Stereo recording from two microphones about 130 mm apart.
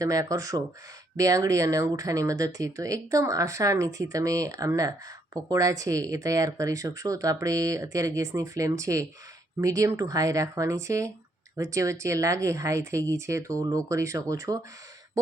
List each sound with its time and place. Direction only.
0.0 s speech: 25° right (ahead or behind)